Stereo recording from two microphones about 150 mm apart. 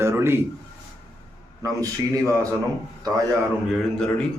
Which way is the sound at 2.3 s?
20° right (ahead or behind).